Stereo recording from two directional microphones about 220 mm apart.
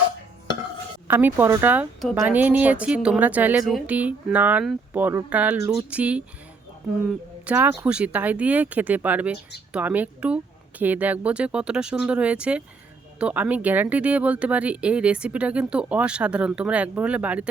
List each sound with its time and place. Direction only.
1.0 s speech: 10° right (ahead or behind)